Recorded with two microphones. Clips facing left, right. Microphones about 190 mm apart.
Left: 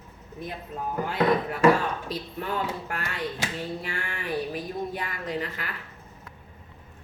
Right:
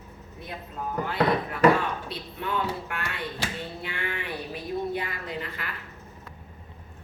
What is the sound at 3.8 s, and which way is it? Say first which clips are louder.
A woman's voice: right 1 dB; 45° left (ahead or behind).